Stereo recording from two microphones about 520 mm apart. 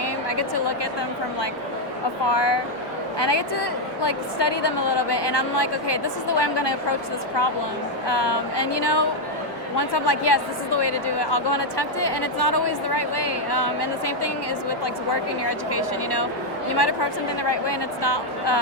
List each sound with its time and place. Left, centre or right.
0.0 s a sound: left
2.3 s speech: left
8.0 s speech: left